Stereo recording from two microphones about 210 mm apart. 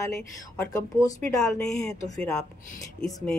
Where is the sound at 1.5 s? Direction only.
5° left (ahead or behind).